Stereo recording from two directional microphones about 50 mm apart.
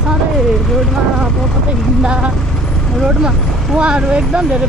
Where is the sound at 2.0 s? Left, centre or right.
Centre.